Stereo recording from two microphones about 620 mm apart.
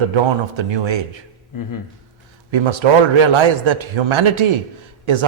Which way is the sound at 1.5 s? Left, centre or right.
Left.